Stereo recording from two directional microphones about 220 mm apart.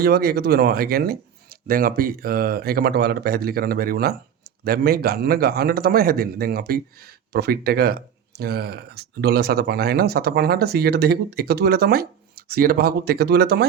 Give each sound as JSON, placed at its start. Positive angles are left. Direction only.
{"t": 0.0, "sound": "a man's voice", "side_deg": -45}